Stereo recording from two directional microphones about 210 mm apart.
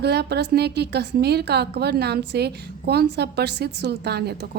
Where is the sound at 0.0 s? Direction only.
50° right (ahead or behind).